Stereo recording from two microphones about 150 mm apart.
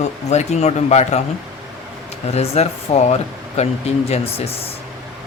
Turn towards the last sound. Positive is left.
turn(degrees=40)  # may be behind; listen again after turning